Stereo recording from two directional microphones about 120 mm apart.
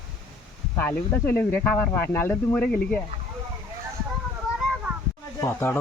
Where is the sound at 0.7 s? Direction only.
15° left (ahead or behind).